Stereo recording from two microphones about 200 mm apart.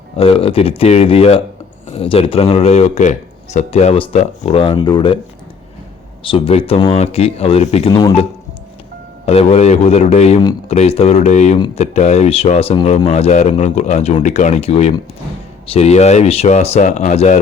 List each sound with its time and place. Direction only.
0.2 s speech: 30° left (ahead or behind)
6.2 s speech: 25° left (ahead or behind)
9.2 s speech: 30° left (ahead or behind)